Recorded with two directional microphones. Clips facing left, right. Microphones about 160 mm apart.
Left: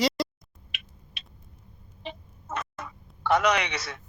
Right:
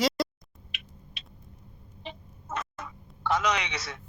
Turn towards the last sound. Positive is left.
turn(degrees=65)  # may be behind; listen again after turning